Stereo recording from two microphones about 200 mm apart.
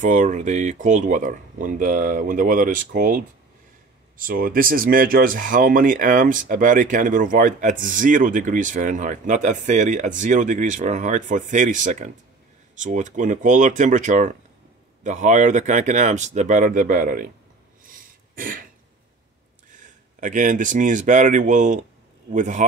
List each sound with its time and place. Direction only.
0.0 s speech: 40° right (ahead or behind)
17.8 s throat clearing: 45° right (ahead or behind)
19.7 s speech: 40° right (ahead or behind)